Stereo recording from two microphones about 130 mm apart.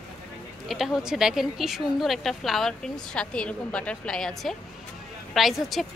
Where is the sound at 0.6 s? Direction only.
Centre (ahead or behind).